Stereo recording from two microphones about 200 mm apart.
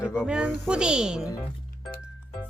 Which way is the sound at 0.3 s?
5° right (ahead or behind).